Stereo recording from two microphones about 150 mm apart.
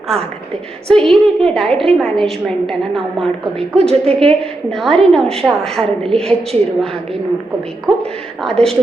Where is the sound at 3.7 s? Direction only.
45° right (ahead or behind).